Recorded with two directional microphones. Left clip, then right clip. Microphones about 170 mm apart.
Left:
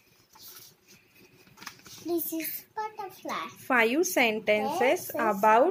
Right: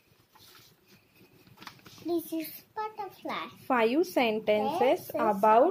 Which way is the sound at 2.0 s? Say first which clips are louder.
Even; 5° right (ahead or behind).